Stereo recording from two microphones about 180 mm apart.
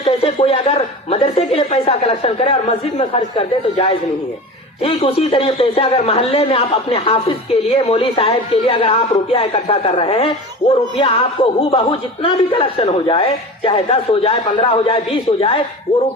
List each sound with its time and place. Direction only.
0.0 s a man's voice: 35° left (ahead or behind)